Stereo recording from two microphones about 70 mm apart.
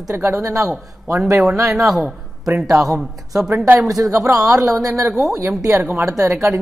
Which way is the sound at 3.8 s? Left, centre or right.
Right.